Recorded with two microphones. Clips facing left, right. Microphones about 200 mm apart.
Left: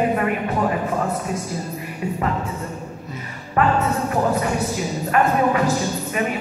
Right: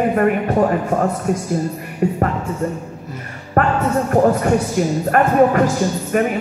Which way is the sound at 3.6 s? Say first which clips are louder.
Right 2 dB; 55° right (ahead or behind).